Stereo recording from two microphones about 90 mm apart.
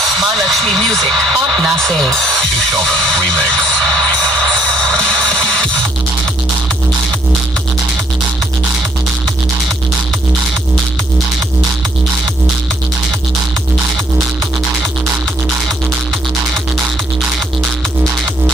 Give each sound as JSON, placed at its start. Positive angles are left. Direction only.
{"t": 0.0, "sound": "speech", "side_deg": 0}